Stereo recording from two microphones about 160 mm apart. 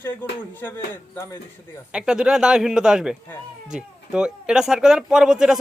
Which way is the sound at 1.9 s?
5° right (ahead or behind).